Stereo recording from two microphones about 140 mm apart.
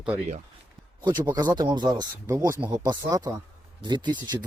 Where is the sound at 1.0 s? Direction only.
30° right (ahead or behind).